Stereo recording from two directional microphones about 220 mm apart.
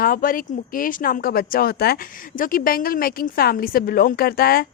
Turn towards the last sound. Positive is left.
turn(degrees=45)  # may be behind; listen again after turning